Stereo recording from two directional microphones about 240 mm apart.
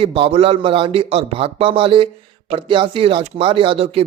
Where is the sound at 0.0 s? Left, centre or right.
Right.